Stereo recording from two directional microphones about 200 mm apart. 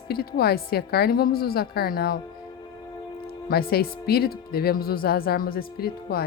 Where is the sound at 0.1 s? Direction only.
50° left (ahead or behind).